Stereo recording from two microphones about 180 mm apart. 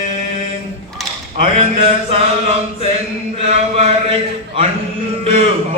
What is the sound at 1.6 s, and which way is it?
Mantra, 30° right (ahead or behind).